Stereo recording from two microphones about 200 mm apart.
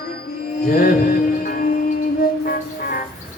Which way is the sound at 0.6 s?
45° left (ahead or behind).